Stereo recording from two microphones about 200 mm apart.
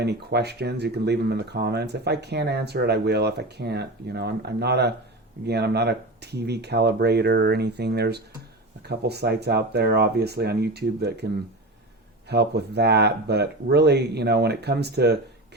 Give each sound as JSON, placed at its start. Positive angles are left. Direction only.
{"t": 0.0, "sound": "speech", "side_deg": -55}
{"t": 12.3, "sound": "speech", "side_deg": -55}